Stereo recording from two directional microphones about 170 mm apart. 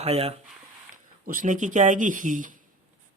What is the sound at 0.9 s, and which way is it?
Speech, 50° right (ahead or behind).